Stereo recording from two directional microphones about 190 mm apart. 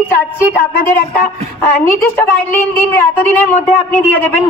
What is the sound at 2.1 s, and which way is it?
Speech, 10° left (ahead or behind).